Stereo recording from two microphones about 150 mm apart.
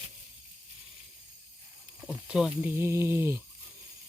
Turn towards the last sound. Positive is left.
turn(degrees=-15)  # may be behind; listen again after turning